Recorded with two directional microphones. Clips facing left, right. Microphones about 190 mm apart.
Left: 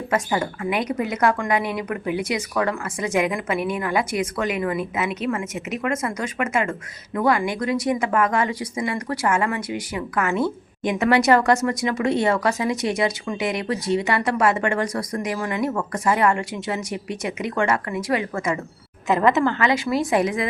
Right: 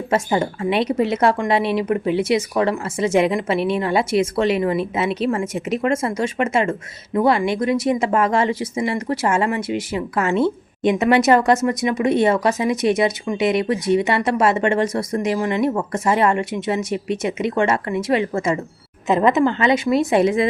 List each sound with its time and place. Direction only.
0.1 s a woman's voice: 25° right (ahead or behind)